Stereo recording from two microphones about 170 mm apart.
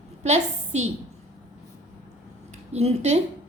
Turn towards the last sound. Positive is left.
turn(degrees=-40)  # may be behind; listen again after turning